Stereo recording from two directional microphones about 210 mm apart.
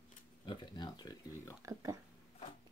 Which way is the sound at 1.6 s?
15° right (ahead or behind).